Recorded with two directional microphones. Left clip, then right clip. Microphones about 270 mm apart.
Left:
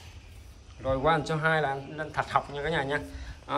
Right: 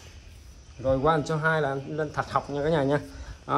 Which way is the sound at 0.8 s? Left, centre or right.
Centre.